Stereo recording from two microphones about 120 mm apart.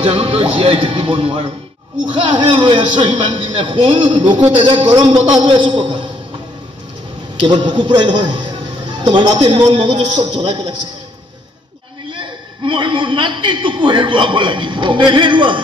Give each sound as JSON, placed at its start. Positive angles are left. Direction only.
{"t": 0.0, "sound": "a man's voice", "side_deg": -55}
{"t": 7.3, "sound": "a man's voice", "side_deg": -40}
{"t": 12.1, "sound": "a man's voice", "side_deg": -40}